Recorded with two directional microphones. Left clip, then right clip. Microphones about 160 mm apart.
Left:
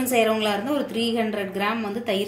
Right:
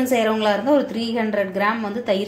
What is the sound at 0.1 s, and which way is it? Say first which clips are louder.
A woman's voice: right 1 dB; 35° right (ahead or behind).